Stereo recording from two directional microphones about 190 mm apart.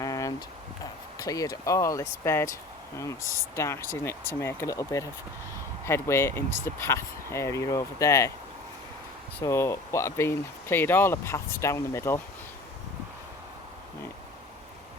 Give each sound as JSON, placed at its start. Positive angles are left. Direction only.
{"t": 0.0, "sound": "a sound", "side_deg": 20}
{"t": 1.2, "sound": "speech", "side_deg": 20}
{"t": 9.4, "sound": "speech", "side_deg": 15}